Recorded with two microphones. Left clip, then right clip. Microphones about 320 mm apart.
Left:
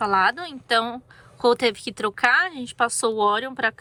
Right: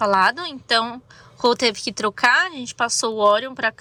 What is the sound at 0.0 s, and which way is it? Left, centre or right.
A woman's voice, centre.